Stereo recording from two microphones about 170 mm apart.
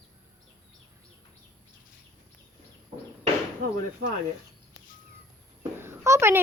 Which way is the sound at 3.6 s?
55° right (ahead or behind).